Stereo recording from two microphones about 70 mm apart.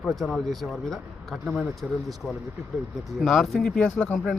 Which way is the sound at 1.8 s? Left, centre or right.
Centre.